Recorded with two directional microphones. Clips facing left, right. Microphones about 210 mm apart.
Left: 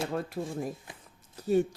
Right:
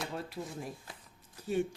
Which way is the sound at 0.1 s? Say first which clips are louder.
Left 7 dB; 50° left (ahead or behind).